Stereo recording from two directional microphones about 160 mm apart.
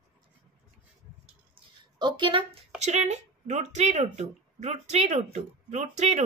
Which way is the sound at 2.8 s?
45° right (ahead or behind).